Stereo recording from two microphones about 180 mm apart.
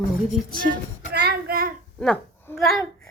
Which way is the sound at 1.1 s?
65° right (ahead or behind).